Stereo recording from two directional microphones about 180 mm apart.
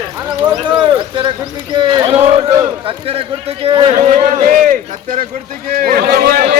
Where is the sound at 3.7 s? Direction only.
30° right (ahead or behind).